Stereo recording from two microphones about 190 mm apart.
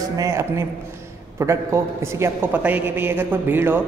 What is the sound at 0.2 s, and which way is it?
A woman's voice, 15° right (ahead or behind).